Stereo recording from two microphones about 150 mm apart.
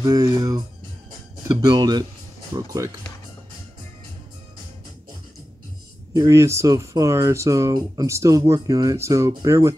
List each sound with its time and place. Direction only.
0.0 s speech: 25° right (ahead or behind)
1.6 s speech: 25° right (ahead or behind)
6.1 s speech: 20° right (ahead or behind)